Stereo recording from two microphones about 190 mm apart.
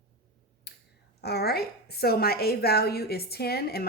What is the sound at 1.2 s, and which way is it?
A woman's voice, 60° left (ahead or behind).